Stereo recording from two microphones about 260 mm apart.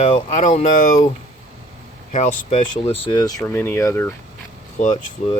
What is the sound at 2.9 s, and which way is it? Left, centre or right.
Speech, centre.